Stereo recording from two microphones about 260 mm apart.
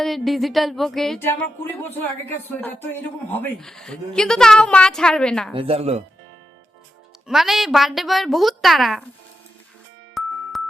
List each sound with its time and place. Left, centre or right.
0.0 s a woman's voice: centre
5.5 s speech: right
7.3 s a woman's voice: centre
10.2 s music: centre